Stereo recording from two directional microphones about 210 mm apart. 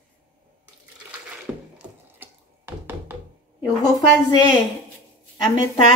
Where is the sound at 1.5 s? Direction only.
5° right (ahead or behind).